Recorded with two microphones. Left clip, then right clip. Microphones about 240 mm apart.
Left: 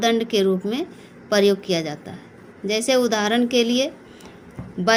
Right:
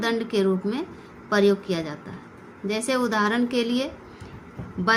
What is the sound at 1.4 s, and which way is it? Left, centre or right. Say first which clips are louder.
Speech: left 2 dB; centre.